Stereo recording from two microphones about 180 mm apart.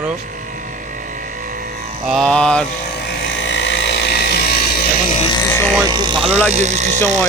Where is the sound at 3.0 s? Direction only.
90° left; by 4.8 s 65° left (ahead or behind).